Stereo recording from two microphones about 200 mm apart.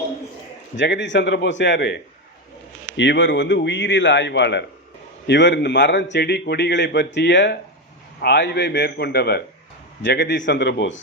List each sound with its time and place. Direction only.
0.8 s a man's voice: 65° left (ahead or behind)
3.0 s a man's voice: 65° left (ahead or behind)